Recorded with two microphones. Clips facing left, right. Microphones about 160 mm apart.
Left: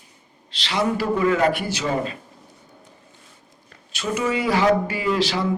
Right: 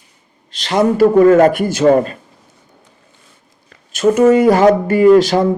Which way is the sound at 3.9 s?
50° right (ahead or behind).